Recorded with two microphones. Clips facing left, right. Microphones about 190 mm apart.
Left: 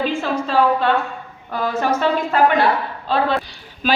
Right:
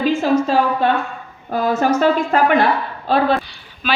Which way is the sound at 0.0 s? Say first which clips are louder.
Right 5 dB; 40° right (ahead or behind).